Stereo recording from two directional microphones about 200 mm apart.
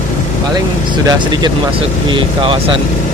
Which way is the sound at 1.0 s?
20° right (ahead or behind).